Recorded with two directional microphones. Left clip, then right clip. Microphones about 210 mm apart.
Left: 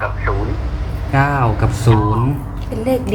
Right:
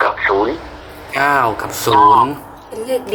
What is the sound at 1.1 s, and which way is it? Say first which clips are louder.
Speech: right 3 dB; 40° right (ahead or behind).